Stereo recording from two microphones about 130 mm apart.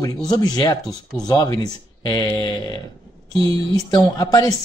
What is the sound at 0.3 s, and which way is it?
Speech, 30° left (ahead or behind).